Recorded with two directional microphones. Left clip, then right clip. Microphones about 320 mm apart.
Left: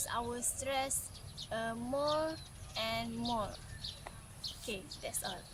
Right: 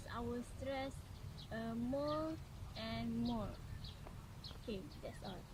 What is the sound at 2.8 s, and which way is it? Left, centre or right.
Speech, left.